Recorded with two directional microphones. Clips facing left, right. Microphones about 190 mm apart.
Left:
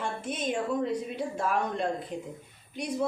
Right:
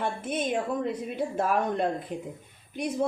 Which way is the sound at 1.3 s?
55° right (ahead or behind).